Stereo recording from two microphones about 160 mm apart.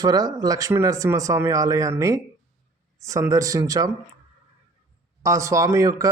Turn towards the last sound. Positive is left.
turn(degrees=-20)  # may be behind; listen again after turning